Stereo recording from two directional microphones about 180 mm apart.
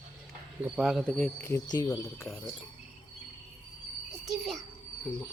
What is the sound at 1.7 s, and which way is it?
Speech, 20° left (ahead or behind).